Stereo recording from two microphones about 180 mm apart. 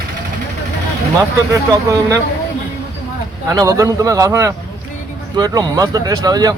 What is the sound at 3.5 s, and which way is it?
Speech, 20° right (ahead or behind).